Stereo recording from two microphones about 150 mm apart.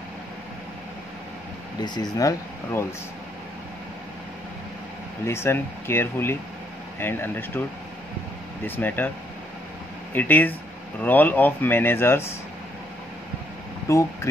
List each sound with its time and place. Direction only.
1.8 s speech: 25° left (ahead or behind)
5.2 s speech: 15° left (ahead or behind)
8.6 s speech: 15° left (ahead or behind)
10.1 s speech: 10° left (ahead or behind)
13.8 s speech: 20° left (ahead or behind)